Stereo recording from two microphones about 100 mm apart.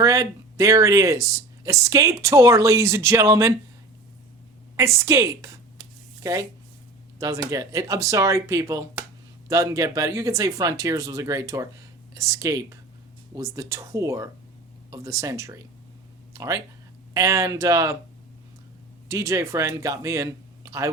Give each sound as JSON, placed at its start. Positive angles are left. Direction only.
{"t": 0.0, "sound": "speech", "side_deg": -30}
{"t": 4.8, "sound": "a woman's voice", "side_deg": -30}
{"t": 19.0, "sound": "speech", "side_deg": -30}